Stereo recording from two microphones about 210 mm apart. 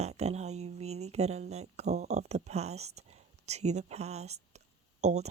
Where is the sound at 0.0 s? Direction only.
30° right (ahead or behind).